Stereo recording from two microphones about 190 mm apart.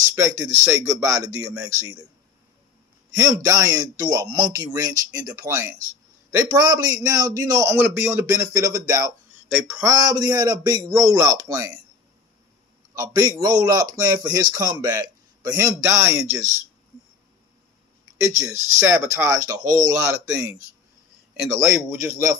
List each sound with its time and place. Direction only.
0.0 s a man's voice: 15° right (ahead or behind)
3.2 s a man's voice: 20° right (ahead or behind)
12.9 s a man's voice: 20° right (ahead or behind)
18.2 s a man's voice: 15° right (ahead or behind)
21.7 s a man's voice: 10° right (ahead or behind)